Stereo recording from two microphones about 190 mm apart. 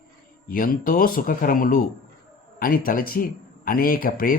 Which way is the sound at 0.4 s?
50° left (ahead or behind).